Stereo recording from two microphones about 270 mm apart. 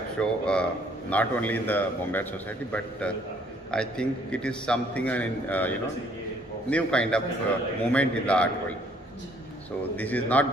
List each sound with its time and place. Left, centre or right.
0.2 s a man's voice: centre
9.9 s a man's voice: centre